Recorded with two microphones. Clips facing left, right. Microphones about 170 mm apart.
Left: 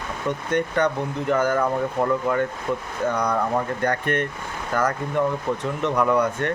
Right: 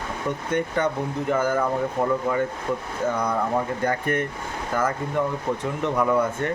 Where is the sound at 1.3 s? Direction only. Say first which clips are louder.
Left 2 dB; 10° right (ahead or behind).